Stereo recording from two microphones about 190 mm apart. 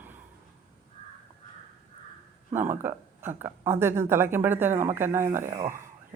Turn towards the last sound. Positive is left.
turn(degrees=-35)  # may be behind; listen again after turning